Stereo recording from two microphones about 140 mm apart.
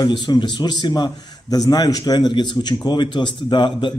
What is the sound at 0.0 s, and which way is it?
A man's voice, 30° left (ahead or behind).